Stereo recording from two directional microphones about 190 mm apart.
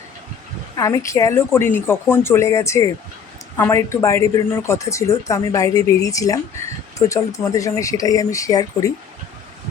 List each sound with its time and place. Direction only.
0.8 s speech: 15° left (ahead or behind)